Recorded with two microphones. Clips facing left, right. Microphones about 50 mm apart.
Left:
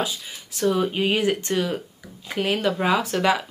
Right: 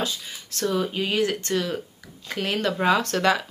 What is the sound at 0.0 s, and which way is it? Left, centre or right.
Speech, centre.